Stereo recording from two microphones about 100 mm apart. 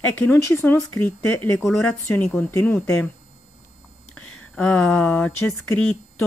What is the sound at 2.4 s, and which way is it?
Speech, 25° left (ahead or behind).